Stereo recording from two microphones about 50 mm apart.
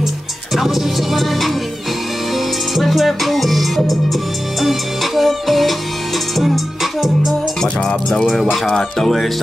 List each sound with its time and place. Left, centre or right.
0.6 s music: centre
7.6 s music: centre